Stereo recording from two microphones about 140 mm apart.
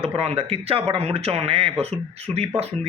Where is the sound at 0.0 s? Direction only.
45° right (ahead or behind).